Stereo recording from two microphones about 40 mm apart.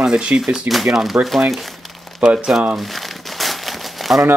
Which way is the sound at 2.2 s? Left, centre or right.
Right.